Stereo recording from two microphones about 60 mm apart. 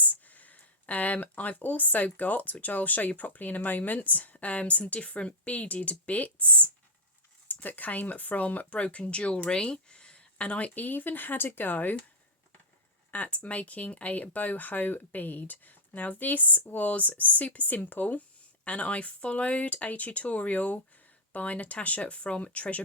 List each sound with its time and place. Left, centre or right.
0.3 s speech: left
13.1 s speech: left